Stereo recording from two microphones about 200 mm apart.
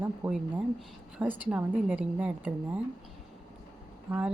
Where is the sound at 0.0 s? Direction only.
10° right (ahead or behind).